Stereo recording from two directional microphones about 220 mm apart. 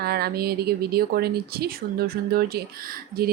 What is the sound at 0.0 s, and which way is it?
Speech, 45° right (ahead or behind).